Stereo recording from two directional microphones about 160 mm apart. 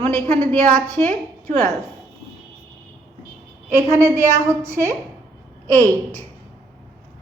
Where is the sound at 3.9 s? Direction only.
20° right (ahead or behind).